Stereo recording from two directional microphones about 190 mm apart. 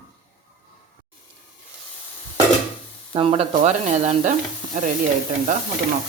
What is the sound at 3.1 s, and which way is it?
Speech, 30° right (ahead or behind).